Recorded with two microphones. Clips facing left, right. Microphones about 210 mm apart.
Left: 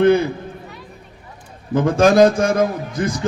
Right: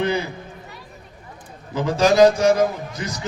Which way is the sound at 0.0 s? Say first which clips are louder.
Left 9 dB; 55° left (ahead or behind).